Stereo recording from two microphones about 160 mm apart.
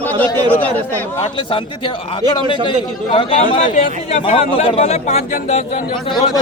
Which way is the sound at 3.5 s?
45° left (ahead or behind).